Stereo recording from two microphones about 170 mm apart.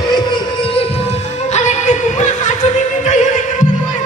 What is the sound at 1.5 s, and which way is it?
Music, 45° left (ahead or behind).